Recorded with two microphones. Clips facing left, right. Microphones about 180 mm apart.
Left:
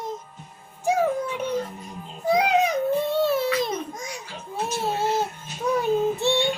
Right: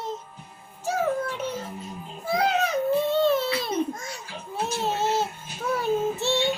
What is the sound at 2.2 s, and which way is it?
Baby cry, 15° left (ahead or behind).